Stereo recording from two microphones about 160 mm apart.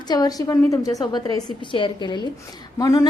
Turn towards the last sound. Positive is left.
turn(degrees=20)  # may be behind; listen again after turning